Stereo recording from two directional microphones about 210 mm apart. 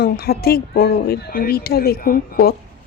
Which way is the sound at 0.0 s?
45° left (ahead or behind).